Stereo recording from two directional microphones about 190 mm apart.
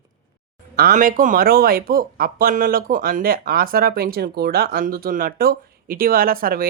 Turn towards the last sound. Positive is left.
turn(degrees=-50)  # may be behind; listen again after turning